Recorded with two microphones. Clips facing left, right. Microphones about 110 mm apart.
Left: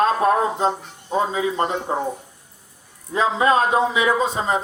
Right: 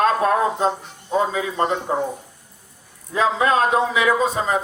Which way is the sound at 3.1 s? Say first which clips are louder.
Even; 20° left (ahead or behind).